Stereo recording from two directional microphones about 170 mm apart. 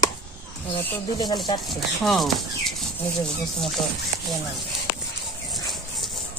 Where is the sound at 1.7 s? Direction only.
Centre (ahead or behind).